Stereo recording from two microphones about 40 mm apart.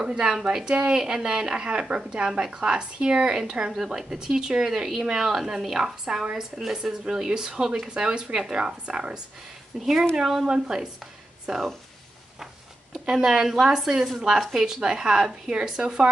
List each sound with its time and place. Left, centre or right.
0.0 s speech: centre
9.8 s speech: centre
13.0 s speech: centre